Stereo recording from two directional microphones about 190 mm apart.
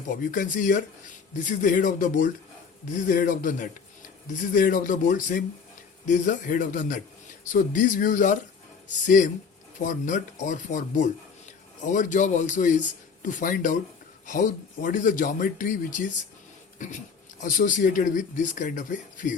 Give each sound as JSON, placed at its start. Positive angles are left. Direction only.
{"t": 0.3, "sound": "speech", "side_deg": 45}
{"t": 17.4, "sound": "speech", "side_deg": 45}